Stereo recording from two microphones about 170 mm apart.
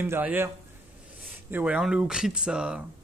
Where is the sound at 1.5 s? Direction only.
10° right (ahead or behind).